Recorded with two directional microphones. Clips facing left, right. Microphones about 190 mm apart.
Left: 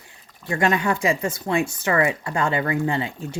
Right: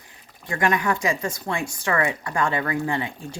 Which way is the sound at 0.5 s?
25° left (ahead or behind).